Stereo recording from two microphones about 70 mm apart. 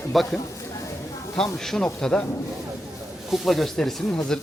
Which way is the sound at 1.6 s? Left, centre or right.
Centre.